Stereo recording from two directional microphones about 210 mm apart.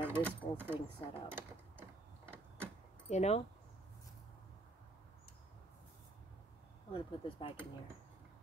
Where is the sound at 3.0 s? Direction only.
30° left (ahead or behind).